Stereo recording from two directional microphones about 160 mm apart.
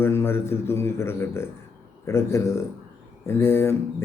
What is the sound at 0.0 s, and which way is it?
Mantra, 15° left (ahead or behind).